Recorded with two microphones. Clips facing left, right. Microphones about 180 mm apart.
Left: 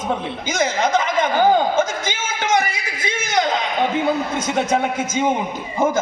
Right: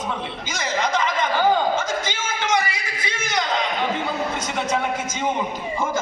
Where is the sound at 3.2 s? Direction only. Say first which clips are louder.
Left 5 dB; 45° left (ahead or behind).